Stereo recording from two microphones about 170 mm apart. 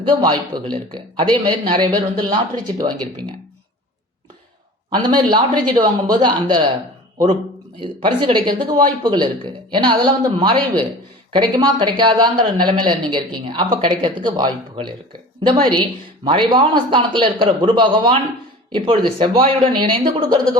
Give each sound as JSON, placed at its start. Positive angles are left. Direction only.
{"t": 0.1, "sound": "speech", "side_deg": -25}
{"t": 4.9, "sound": "speech", "side_deg": -25}
{"t": 8.2, "sound": "speech", "side_deg": -25}